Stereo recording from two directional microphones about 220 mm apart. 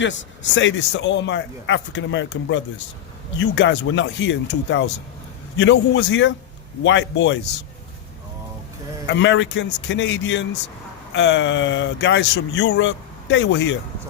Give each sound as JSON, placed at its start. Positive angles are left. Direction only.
{"t": 0.0, "sound": "speech", "side_deg": 55}
{"t": 9.0, "sound": "speech", "side_deg": 55}